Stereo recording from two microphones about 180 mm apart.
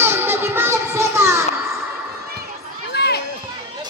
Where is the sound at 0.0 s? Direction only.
10° right (ahead or behind).